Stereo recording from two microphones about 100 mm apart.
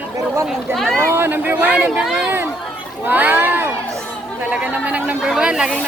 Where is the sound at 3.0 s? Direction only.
20° right (ahead or behind).